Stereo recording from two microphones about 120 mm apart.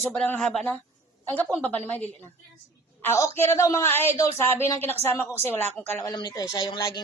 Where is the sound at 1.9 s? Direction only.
15° left (ahead or behind).